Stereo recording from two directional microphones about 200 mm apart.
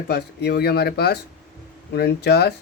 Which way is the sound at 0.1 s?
55° left (ahead or behind).